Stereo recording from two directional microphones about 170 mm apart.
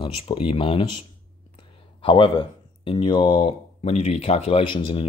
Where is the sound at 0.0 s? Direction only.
30° left (ahead or behind).